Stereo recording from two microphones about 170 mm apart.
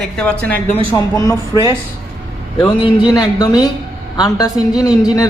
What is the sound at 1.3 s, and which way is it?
A woman's voice, 20° left (ahead or behind).